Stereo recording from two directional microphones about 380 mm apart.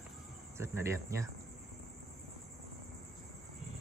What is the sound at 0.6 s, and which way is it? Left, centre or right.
Speech, centre.